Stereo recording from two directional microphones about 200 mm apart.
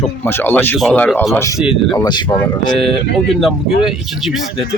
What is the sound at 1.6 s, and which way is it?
Speech, centre (ahead or behind).